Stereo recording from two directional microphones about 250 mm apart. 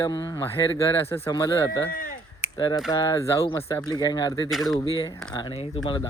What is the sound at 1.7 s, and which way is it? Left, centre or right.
Speech, left.